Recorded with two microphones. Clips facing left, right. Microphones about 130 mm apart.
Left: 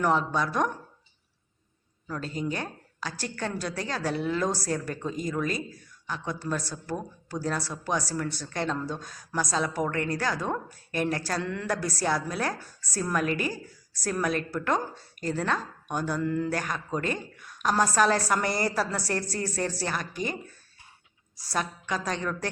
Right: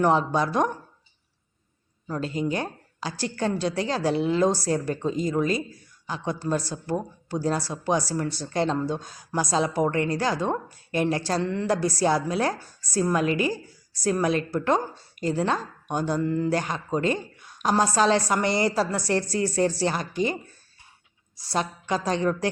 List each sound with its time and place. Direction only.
0.0 s speech: 30° right (ahead or behind)
2.0 s a woman's voice: 30° right (ahead or behind)
21.5 s a woman's voice: 30° right (ahead or behind)